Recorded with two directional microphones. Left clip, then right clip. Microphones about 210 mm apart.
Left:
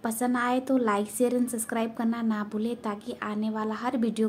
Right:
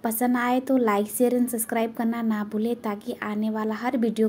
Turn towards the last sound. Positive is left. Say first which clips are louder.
# right 4 dB
turn(degrees=-5)  # may be behind; listen again after turning